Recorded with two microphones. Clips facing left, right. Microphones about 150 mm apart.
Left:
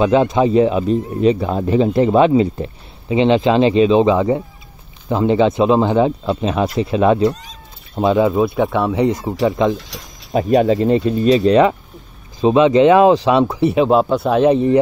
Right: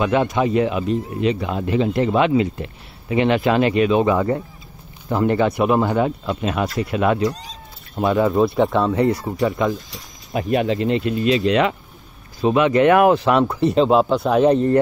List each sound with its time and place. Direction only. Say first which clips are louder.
0.0 s speech: left 5 dB; 25° left (ahead or behind)
3.1 s speech: left 4 dB; 25° left (ahead or behind)
8.3 s speech: left 1 dB; centre (ahead or behind)
8.9 s speech: left 2 dB; 20° left (ahead or behind)
9.8 s speech: left 3 dB; 80° left
10.3 s speech: left 6 dB; 35° left (ahead or behind); by 14.6 s 5° left (ahead or behind)